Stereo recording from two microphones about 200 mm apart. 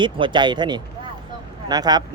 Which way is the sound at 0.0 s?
25° right (ahead or behind).